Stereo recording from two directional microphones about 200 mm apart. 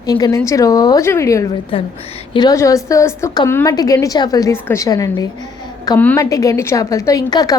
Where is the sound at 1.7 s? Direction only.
30° left (ahead or behind).